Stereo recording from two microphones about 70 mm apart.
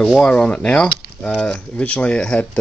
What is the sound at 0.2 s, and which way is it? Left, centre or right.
Speech, centre.